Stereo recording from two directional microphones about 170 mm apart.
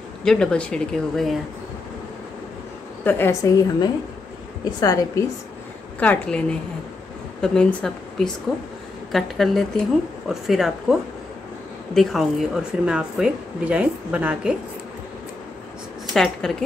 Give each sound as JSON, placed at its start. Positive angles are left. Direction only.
{"t": 0.2, "sound": "speech", "side_deg": 5}
{"t": 3.0, "sound": "a woman's voice", "side_deg": 10}
{"t": 5.9, "sound": "a woman's voice", "side_deg": 5}
{"t": 7.4, "sound": "speech", "side_deg": 5}
{"t": 16.1, "sound": "speech", "side_deg": 5}